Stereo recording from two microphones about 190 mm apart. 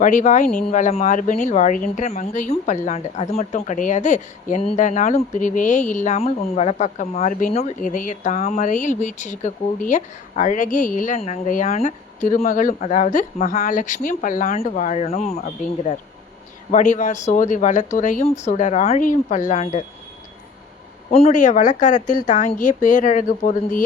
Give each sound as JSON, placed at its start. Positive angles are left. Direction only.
{"t": 0.0, "sound": "speech", "side_deg": 40}
{"t": 21.1, "sound": "speech", "side_deg": 30}